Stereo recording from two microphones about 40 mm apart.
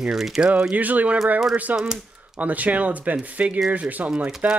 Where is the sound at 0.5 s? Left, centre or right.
Right.